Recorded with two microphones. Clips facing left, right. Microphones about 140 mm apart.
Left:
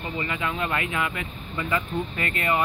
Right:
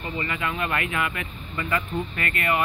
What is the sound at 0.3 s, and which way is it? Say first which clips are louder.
Speech: even; 20° left (ahead or behind).